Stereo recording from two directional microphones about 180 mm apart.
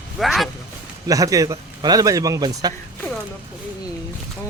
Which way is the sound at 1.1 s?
20° right (ahead or behind).